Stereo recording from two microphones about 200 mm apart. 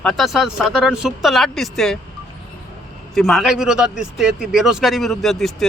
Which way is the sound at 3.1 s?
Centre (ahead or behind).